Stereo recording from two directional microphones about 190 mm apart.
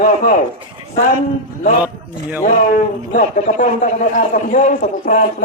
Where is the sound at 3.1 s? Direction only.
40° left (ahead or behind).